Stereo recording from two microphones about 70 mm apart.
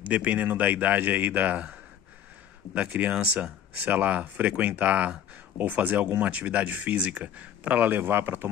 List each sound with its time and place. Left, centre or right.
0.1 s speech: right